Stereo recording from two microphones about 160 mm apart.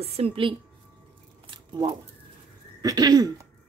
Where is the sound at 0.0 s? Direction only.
40° right (ahead or behind).